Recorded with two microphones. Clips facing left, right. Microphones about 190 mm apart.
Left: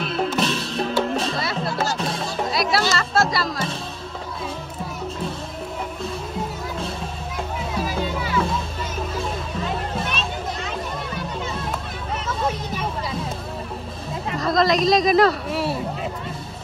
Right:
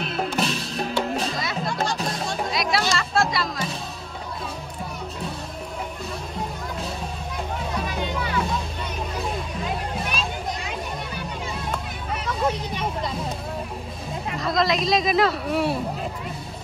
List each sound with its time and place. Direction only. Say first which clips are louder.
0.1 s music: left 3 dB; 5° right (ahead or behind)
0.5 s music: left 3 dB; 30° left (ahead or behind)
1.7 s music: left 2 dB; 5° left (ahead or behind)
14.4 s speech: left 4 dB; centre (ahead or behind)